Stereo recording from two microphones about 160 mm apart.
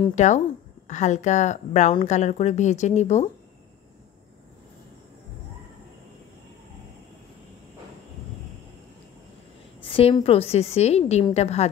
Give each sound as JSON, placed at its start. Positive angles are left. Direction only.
{"t": 0.1, "sound": "speech", "side_deg": 45}
{"t": 9.8, "sound": "a woman's voice", "side_deg": 35}